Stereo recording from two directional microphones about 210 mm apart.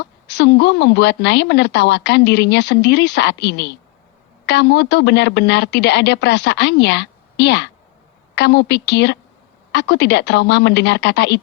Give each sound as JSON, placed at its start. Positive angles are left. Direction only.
{"t": 0.0, "sound": "a woman's voice", "side_deg": 55}